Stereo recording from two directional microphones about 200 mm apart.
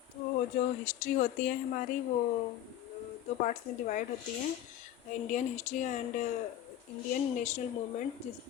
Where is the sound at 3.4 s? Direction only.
40° left (ahead or behind).